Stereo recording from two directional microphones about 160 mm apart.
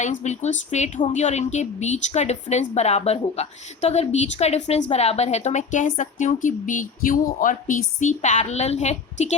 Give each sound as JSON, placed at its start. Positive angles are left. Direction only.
{"t": 0.0, "sound": "a woman's voice", "side_deg": 45}